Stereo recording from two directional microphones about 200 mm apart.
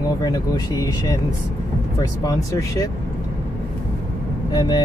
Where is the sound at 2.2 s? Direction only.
15° left (ahead or behind).